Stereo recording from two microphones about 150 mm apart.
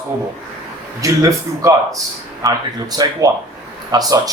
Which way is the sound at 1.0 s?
20° right (ahead or behind).